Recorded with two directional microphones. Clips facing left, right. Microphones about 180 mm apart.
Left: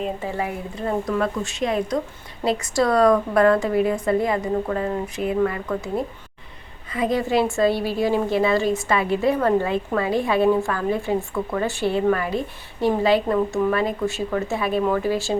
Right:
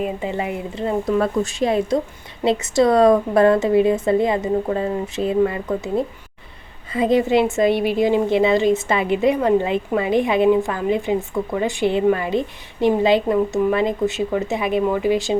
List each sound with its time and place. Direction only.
0.0 s a woman's voice: 15° right (ahead or behind)
6.9 s a woman's voice: 25° right (ahead or behind)